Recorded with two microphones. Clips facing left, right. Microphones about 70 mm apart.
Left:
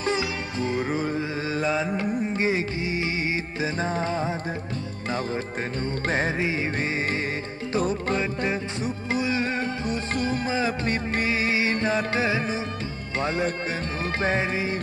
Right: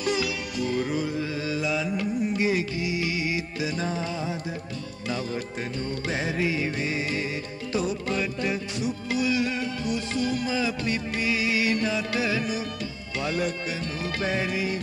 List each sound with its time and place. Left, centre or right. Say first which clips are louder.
0.0 s music: left 1 dB; left
6.0 s music: left 2 dB; left
13.2 s speech: left 2 dB; left
14.2 s music: left 2 dB; left